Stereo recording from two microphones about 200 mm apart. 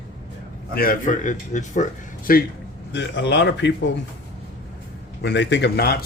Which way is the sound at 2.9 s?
60° left (ahead or behind).